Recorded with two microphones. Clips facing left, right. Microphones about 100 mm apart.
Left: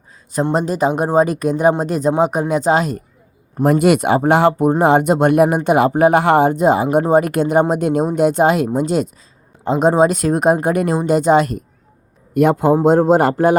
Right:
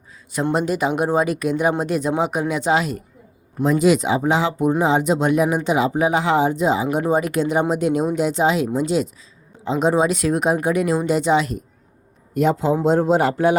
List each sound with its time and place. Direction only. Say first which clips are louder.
0.5 s speech: left 3 dB; 40° left (ahead or behind)
3.6 s speech: left 3 dB; 60° left (ahead or behind)